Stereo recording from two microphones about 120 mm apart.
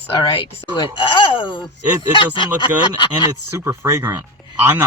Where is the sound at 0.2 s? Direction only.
40° left (ahead or behind).